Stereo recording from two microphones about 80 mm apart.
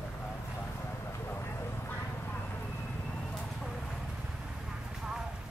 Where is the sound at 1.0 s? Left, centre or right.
Left.